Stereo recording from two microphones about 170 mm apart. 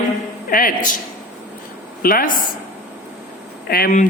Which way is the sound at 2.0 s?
55° left (ahead or behind).